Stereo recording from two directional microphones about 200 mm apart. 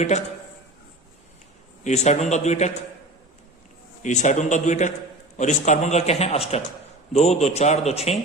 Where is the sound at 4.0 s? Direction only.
35° left (ahead or behind).